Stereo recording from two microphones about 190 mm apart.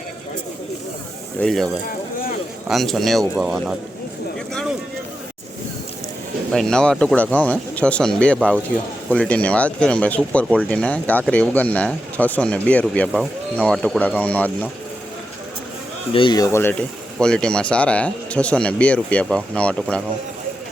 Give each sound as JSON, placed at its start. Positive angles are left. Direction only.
{"t": 1.4, "sound": "speech", "side_deg": 0}
{"t": 6.5, "sound": "speech", "side_deg": 5}
{"t": 16.1, "sound": "speech", "side_deg": 25}